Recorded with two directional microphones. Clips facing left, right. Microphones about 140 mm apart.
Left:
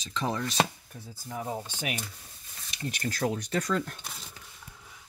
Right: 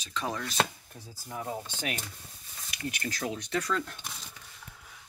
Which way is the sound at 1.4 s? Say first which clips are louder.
Left 1 dB; 20° left (ahead or behind).